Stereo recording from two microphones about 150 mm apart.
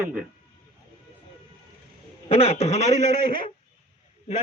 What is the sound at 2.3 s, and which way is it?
Speech, 45° left (ahead or behind).